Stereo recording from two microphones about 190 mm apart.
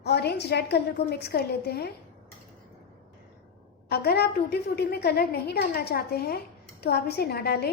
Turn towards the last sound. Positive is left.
turn(degrees=60)  # may be behind; listen again after turning